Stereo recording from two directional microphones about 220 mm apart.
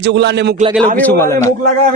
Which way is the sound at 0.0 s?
50° right (ahead or behind).